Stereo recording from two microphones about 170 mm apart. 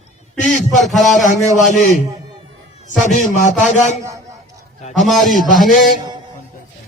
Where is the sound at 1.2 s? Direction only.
45° left (ahead or behind).